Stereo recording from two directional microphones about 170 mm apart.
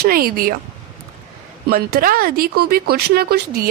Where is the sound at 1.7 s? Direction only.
60° right (ahead or behind).